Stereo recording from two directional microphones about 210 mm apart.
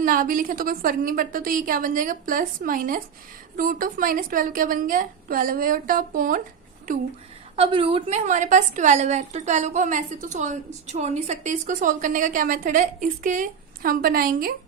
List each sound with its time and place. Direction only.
0.0 s a woman's voice: 40° right (ahead or behind)
7.5 s a woman's voice: 25° right (ahead or behind); by 14.5 s 45° right (ahead or behind)